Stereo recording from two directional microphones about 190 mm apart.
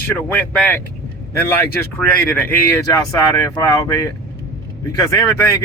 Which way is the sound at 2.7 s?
15° left (ahead or behind).